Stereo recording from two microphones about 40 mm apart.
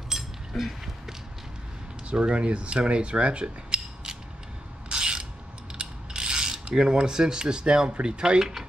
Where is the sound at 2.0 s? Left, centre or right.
Right.